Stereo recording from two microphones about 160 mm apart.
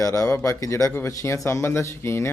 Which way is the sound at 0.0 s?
20° left (ahead or behind).